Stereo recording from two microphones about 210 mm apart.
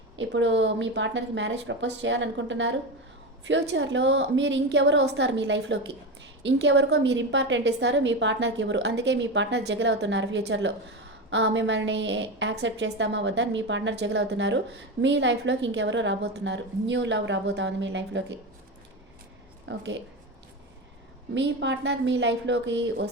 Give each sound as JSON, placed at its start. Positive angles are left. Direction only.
{"t": 0.2, "sound": "a woman's voice", "side_deg": -60}
{"t": 19.6, "sound": "a woman's voice", "side_deg": -60}
{"t": 21.3, "sound": "a woman's voice", "side_deg": -60}